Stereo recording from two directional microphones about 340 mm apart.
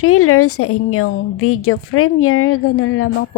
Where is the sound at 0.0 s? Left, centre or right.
Left.